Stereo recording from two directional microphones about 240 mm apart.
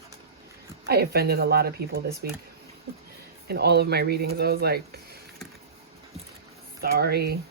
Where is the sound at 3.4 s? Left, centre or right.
Right.